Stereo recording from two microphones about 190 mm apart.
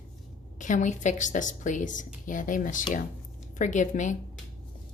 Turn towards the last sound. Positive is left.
turn(degrees=40)  # may be behind; listen again after turning